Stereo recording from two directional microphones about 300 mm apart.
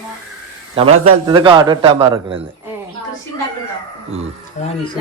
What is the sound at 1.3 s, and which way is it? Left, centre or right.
Speech, centre.